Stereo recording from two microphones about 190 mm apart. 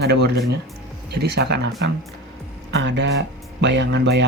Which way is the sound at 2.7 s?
65° right (ahead or behind).